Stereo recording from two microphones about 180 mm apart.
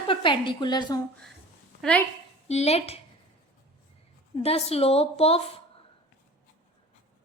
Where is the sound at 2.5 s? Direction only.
35° left (ahead or behind).